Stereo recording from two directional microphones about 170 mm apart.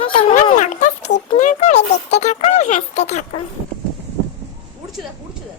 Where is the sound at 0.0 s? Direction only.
30° left (ahead or behind).